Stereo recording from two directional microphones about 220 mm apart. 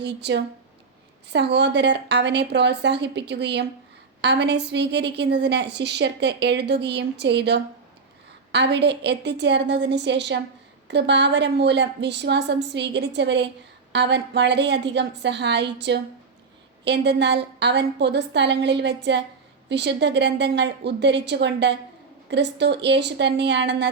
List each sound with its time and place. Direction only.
0.0 s a woman's voice: 50° right (ahead or behind)